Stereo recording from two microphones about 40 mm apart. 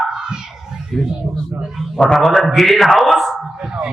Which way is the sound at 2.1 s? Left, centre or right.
Centre.